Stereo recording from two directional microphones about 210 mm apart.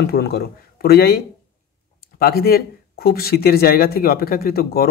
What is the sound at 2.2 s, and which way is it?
Speech, 45° left (ahead or behind).